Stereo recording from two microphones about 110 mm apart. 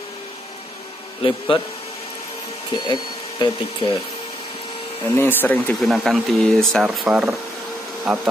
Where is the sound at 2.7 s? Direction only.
40° left (ahead or behind).